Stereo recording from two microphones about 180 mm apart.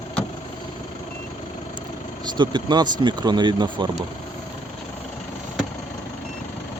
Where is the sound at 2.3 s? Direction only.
25° right (ahead or behind).